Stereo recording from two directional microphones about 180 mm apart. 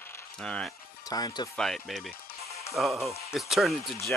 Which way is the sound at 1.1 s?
20° left (ahead or behind).